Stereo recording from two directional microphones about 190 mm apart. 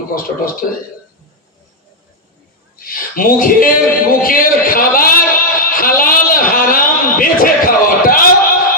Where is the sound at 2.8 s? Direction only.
50° left (ahead or behind).